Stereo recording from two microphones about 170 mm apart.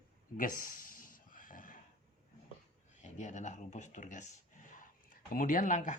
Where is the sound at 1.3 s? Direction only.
55° left (ahead or behind).